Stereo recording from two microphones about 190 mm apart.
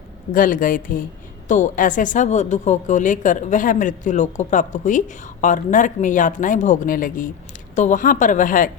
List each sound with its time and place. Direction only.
0.3 s a woman's voice: 45° left (ahead or behind)